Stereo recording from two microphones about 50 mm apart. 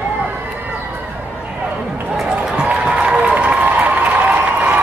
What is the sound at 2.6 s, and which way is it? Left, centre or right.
Crowd, right.